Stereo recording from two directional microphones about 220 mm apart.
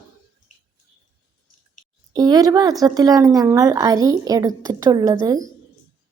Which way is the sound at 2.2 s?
15° right (ahead or behind).